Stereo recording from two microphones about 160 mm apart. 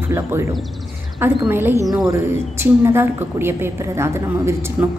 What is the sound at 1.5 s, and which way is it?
A woman's voice, 15° right (ahead or behind).